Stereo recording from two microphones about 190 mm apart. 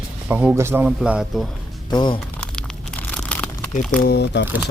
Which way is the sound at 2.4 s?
5° left (ahead or behind).